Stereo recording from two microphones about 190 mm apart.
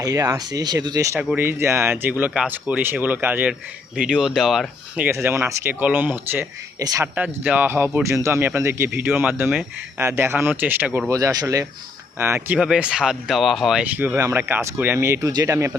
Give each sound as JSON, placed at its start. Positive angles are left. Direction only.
{"t": 0.0, "sound": "speech", "side_deg": -20}